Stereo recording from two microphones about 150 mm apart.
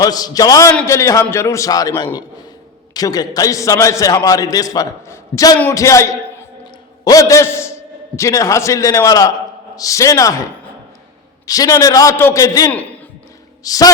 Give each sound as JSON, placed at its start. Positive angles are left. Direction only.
{"t": 0.0, "sound": "a man's voice", "side_deg": 25}
{"t": 11.4, "sound": "a man's voice", "side_deg": 25}